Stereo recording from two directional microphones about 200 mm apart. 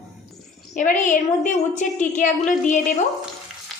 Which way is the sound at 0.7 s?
40° left (ahead or behind).